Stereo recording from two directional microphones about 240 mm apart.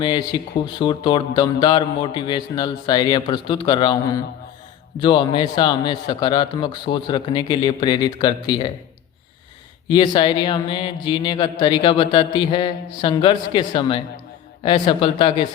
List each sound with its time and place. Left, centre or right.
0.0 s a man's voice: centre
9.9 s a man's voice: centre